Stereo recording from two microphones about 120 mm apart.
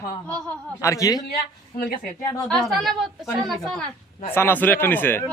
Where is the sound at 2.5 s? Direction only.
Centre (ahead or behind).